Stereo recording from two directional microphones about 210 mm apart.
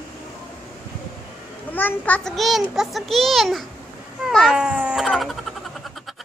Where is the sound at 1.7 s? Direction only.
10° left (ahead or behind).